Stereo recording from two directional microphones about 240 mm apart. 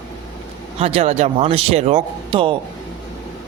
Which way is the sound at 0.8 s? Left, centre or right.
Right.